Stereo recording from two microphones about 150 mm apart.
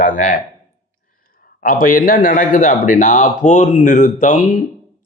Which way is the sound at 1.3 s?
70° left (ahead or behind).